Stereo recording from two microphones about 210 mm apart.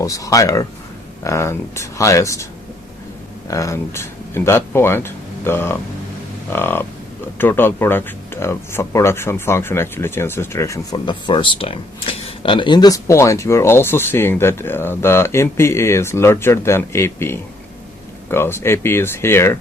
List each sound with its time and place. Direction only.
0.0 s speech: 15° left (ahead or behind)
3.5 s speech: 15° left (ahead or behind)